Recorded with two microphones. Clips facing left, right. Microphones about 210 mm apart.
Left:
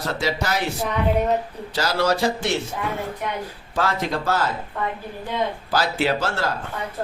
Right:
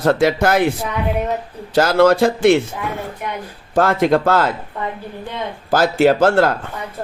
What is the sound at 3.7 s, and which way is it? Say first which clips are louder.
Speech: right 9 dB; 50° right (ahead or behind).